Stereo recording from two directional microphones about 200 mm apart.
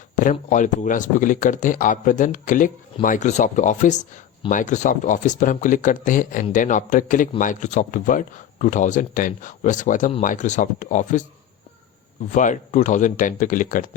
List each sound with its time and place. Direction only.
0.2 s speech: 40° left (ahead or behind)
12.3 s speech: 40° left (ahead or behind)